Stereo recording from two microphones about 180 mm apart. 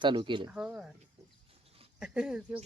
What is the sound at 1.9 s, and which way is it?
Speech, 5° right (ahead or behind).